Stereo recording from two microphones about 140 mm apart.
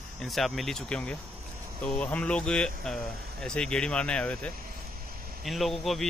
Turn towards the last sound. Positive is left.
turn(degrees=0)  # may be behind; listen again after turning